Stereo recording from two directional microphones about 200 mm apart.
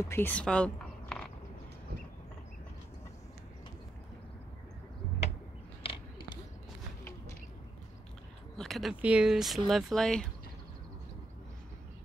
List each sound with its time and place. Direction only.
0.0 s speech: 10° left (ahead or behind)
5.8 s a sound: 25° left (ahead or behind)
8.5 s speech: centre (ahead or behind)